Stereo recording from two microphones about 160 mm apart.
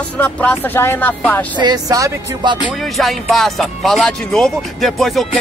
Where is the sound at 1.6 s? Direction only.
25° right (ahead or behind).